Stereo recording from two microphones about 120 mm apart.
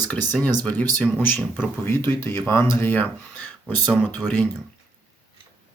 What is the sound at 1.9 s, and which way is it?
Speech, 20° left (ahead or behind).